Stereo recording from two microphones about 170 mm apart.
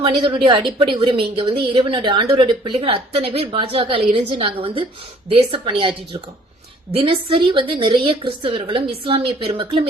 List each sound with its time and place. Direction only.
0.0 s a woman's voice: 30° right (ahead or behind)
6.9 s a woman's voice: 35° right (ahead or behind)